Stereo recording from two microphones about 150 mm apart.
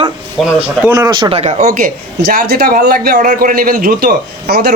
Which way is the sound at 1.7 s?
70° right (ahead or behind).